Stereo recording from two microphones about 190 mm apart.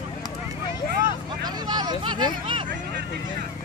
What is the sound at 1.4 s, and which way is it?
Vehicle, 20° right (ahead or behind).